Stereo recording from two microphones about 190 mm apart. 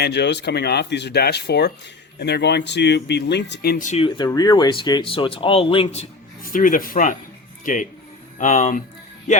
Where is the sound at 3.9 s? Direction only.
30° left (ahead or behind).